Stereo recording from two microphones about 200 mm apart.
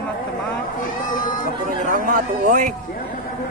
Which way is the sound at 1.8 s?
40° right (ahead or behind).